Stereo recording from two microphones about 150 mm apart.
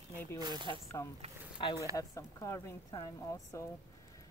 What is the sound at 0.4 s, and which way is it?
Speech, 30° right (ahead or behind).